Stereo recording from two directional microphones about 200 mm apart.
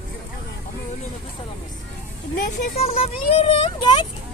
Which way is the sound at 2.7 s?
30° left (ahead or behind).